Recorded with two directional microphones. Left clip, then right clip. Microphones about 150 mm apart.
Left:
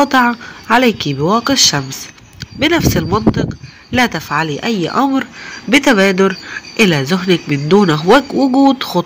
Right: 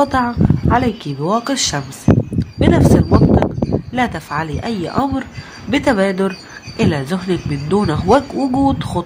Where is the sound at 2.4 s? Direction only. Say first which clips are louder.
Left 6 dB; 15° left (ahead or behind).